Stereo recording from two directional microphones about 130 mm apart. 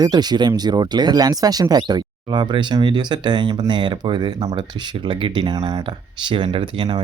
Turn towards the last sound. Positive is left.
turn(degrees=-40)  # may be behind; listen again after turning